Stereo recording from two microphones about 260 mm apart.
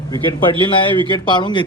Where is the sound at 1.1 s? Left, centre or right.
Centre.